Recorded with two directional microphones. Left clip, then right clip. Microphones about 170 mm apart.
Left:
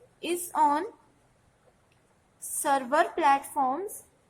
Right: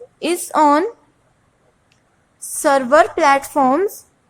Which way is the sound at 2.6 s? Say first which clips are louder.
Right 12 dB; 25° right (ahead or behind).